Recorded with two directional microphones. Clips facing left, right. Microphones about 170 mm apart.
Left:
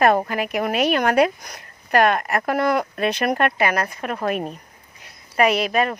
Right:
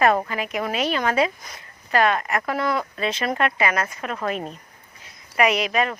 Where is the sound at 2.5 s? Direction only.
55° left (ahead or behind).